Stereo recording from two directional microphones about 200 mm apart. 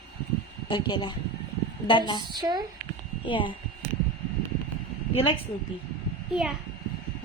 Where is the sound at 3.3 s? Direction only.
25° left (ahead or behind).